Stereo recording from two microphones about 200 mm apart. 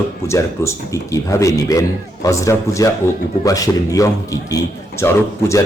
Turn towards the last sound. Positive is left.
turn(degrees=15)  # may be behind; listen again after turning